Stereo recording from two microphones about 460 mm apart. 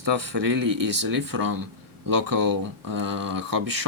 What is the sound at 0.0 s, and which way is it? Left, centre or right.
Speech, right.